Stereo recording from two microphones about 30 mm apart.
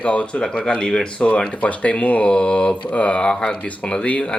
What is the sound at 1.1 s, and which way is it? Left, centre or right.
Speech, left.